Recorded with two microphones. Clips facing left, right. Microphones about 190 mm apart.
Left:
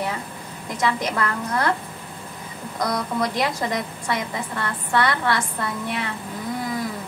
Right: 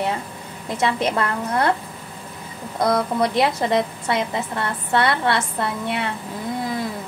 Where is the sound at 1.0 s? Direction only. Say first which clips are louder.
Right 3 dB; 25° right (ahead or behind).